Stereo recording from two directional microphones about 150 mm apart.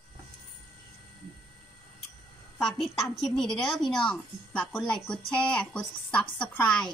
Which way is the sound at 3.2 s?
5° left (ahead or behind).